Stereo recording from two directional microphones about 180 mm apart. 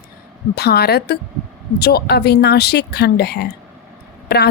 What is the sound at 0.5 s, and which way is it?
A woman's voice, 60° left (ahead or behind).